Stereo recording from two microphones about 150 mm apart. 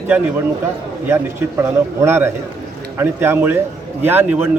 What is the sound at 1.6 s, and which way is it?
A man's voice, 15° right (ahead or behind).